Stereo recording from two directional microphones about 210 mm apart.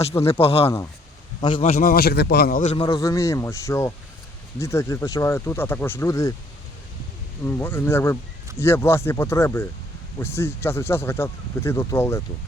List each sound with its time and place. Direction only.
0.3 s a man's voice: 25° left (ahead or behind)
1.8 s a man's voice: 45° left (ahead or behind)
2.8 s speech: 15° left (ahead or behind)
7.4 s speech: 10° left (ahead or behind)